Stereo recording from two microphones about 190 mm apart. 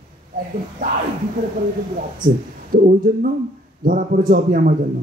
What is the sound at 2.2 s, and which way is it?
A man's voice, 50° right (ahead or behind).